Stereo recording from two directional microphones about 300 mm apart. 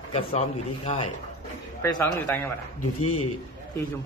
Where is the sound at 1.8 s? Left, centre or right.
Centre.